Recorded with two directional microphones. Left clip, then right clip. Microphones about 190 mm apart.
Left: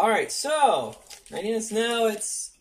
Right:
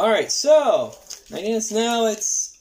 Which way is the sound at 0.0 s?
25° right (ahead or behind).